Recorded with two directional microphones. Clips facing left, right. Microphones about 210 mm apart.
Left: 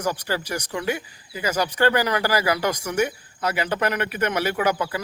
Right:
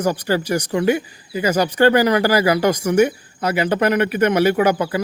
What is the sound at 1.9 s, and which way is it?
Speech, 20° right (ahead or behind).